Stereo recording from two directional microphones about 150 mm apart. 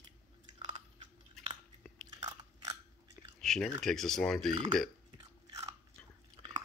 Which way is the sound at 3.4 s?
5° left (ahead or behind).